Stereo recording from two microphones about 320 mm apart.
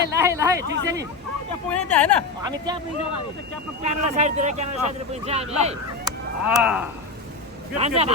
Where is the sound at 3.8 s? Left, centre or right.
Right.